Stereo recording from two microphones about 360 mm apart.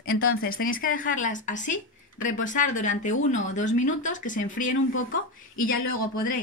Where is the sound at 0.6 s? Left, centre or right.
Left.